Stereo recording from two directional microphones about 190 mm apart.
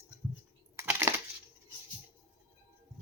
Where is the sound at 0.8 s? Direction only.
15° right (ahead or behind).